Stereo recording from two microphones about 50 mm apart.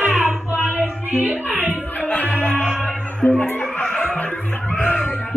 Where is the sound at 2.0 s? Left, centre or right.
Left.